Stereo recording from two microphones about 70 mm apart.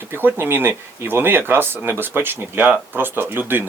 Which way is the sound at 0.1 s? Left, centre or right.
Right.